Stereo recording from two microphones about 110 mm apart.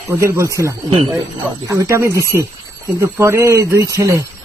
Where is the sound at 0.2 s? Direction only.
25° right (ahead or behind).